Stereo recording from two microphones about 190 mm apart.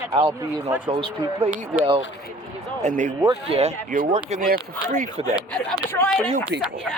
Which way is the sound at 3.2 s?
25° right (ahead or behind).